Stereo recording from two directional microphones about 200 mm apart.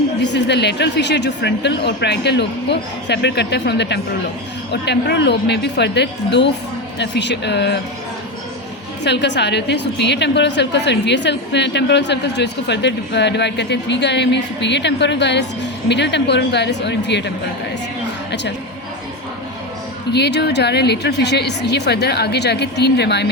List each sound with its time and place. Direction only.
0.2 s a woman's voice: 60° left (ahead or behind)
9.0 s a woman's voice: 60° left (ahead or behind)
20.1 s a woman's voice: 55° left (ahead or behind)